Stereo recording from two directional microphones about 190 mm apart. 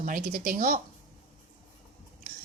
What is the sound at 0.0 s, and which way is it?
Speech, 45° right (ahead or behind).